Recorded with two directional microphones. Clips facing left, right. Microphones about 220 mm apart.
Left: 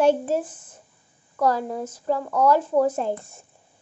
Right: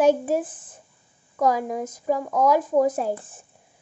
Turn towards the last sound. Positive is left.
turn(degrees=-10)  # may be behind; listen again after turning